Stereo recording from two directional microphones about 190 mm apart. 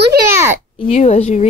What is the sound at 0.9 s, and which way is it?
Speech, 40° left (ahead or behind).